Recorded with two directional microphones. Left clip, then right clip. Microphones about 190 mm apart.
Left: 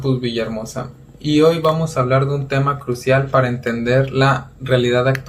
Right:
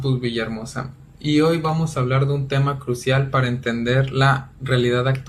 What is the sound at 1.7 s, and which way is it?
Speech, 15° right (ahead or behind).